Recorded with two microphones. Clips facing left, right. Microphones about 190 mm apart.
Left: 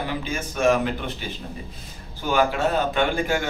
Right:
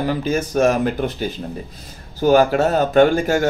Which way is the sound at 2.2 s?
45° right (ahead or behind).